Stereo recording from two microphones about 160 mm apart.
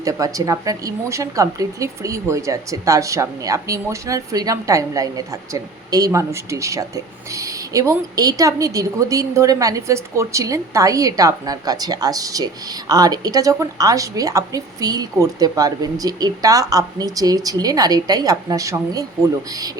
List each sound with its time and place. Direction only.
0.0 s a woman's voice: 20° right (ahead or behind)